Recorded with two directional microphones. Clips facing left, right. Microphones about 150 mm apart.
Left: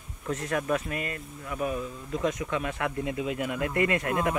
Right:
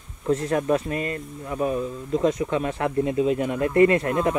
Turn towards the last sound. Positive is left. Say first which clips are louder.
# right 5 dB
turn(degrees=-30)  # may be behind; listen again after turning